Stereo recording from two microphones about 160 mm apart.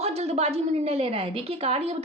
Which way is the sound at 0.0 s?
40° right (ahead or behind).